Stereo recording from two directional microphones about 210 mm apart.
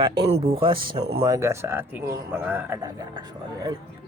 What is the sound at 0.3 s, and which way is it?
Speech, 25° right (ahead or behind).